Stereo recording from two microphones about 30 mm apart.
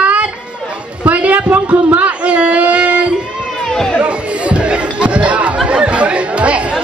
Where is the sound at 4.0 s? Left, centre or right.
Right.